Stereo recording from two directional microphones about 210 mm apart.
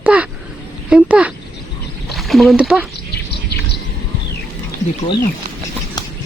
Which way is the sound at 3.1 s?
50° left (ahead or behind).